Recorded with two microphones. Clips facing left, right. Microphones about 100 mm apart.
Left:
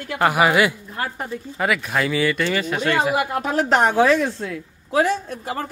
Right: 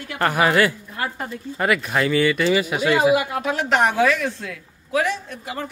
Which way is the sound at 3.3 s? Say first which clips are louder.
Left 2 dB; 40° left (ahead or behind).